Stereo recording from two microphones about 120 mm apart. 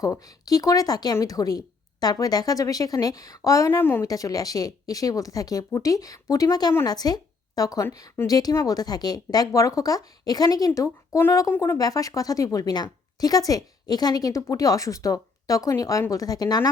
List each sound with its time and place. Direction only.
0.0 s a woman's voice: 30° left (ahead or behind)
4.0 s a woman's voice: 30° left (ahead or behind)